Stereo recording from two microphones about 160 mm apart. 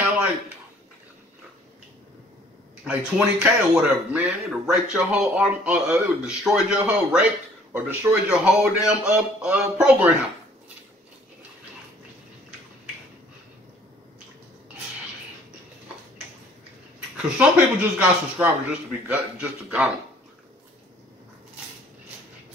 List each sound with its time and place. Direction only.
3.2 s speech: 5° right (ahead or behind)
17.2 s speech: 10° right (ahead or behind)